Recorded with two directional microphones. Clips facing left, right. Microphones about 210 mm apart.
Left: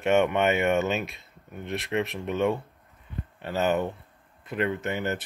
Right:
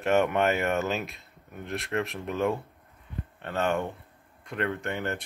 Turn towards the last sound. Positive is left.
turn(degrees=5)  # may be behind; listen again after turning